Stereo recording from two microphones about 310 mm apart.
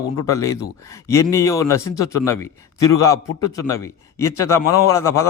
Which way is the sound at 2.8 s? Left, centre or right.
Centre.